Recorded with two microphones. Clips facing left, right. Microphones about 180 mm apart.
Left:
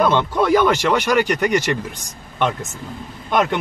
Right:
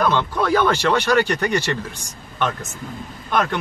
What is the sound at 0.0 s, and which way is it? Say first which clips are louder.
Speech: left 3 dB; 20° left (ahead or behind).